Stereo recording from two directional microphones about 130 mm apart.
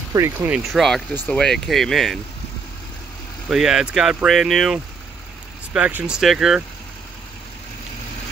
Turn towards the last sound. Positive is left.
turn(degrees=-5)  # may be behind; listen again after turning